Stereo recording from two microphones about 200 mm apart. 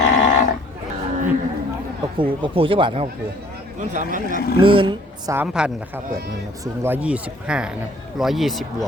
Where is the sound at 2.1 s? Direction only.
25° right (ahead or behind).